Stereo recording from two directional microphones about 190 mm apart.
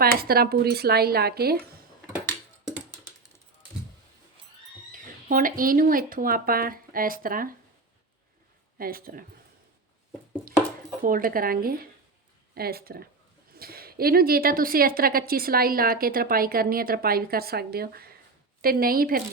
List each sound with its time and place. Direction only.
0.0 s speech: 55° right (ahead or behind)
4.9 s speech: 45° right (ahead or behind)
8.8 s a woman's voice: 50° right (ahead or behind)
11.0 s a woman's voice: 45° right (ahead or behind)